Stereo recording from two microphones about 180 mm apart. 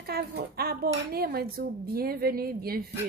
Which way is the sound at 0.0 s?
60° right (ahead or behind).